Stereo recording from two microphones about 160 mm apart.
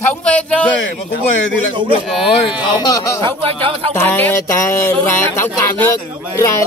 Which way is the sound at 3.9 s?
10° left (ahead or behind).